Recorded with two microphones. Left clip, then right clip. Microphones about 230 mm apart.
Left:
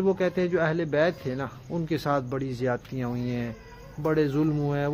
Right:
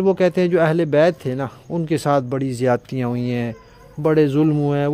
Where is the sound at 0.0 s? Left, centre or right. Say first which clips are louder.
Right 8 dB; right.